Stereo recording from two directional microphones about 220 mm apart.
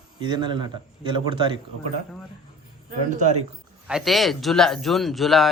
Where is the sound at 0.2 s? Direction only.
20° right (ahead or behind).